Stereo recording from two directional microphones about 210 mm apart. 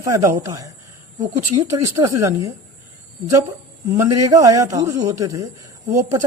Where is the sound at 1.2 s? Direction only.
35° right (ahead or behind).